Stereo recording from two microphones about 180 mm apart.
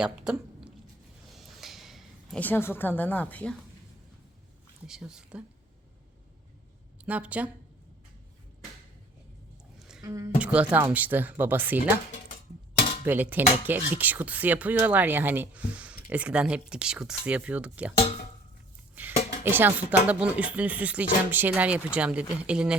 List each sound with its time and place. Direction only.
0.0 s speech: 5° right (ahead or behind)
1.3 s a sound: centre (ahead or behind)
2.4 s a woman's voice: 10° left (ahead or behind)
4.9 s speech: 5° right (ahead or behind)
7.0 s speech: 5° right (ahead or behind)
9.7 s a sound: centre (ahead or behind)
10.0 s a woman's voice: 20° right (ahead or behind)
10.4 s speech: 5° right (ahead or behind)
13.1 s speech: 10° right (ahead or behind)
17.9 s dishes: 35° left (ahead or behind)
19.0 s a sound: 10° right (ahead or behind)
19.5 s speech: 10° right (ahead or behind)